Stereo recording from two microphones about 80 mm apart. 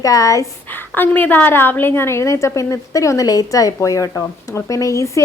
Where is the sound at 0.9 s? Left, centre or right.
Left.